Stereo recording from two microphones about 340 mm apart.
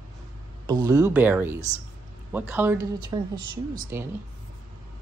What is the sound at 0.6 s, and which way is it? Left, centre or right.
Speech, centre.